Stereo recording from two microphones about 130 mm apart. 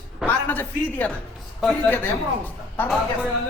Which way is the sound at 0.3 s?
15° left (ahead or behind).